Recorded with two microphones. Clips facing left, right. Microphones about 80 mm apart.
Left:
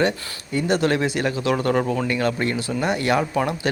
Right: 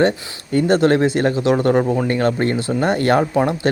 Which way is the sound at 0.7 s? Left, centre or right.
Right.